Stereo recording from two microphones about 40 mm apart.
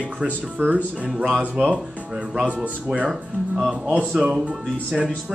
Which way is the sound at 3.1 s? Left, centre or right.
Centre.